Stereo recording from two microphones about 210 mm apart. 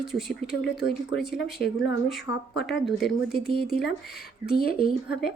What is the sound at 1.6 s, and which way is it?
Speech, 50° left (ahead or behind).